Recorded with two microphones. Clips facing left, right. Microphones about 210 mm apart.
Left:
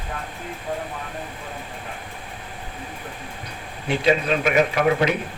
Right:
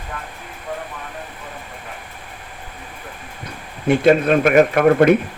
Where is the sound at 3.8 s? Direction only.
50° right (ahead or behind).